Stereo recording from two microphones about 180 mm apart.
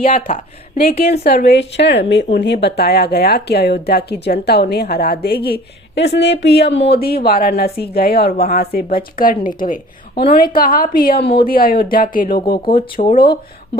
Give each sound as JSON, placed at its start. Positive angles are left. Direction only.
{"t": 0.3, "sound": "a woman's voice", "side_deg": 55}